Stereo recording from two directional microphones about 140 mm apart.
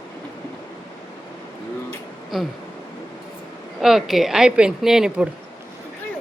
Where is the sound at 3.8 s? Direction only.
Centre (ahead or behind).